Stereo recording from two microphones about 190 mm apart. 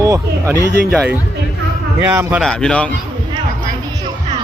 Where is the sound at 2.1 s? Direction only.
10° right (ahead or behind).